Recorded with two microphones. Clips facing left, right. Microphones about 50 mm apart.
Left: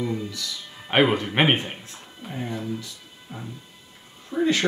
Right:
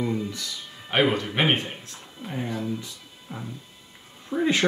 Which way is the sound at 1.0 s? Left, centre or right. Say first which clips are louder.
Left 1 dB; centre.